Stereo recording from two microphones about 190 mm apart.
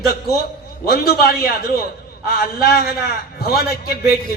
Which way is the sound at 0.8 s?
55° left (ahead or behind).